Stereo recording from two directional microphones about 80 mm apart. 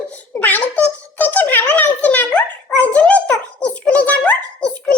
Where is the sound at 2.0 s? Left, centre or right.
Centre.